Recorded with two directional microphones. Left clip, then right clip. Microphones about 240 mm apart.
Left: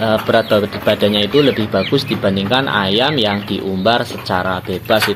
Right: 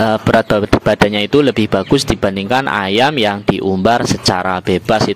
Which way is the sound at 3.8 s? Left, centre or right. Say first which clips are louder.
Right 1 dB; right.